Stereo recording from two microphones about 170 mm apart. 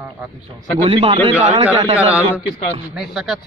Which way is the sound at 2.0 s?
10° right (ahead or behind).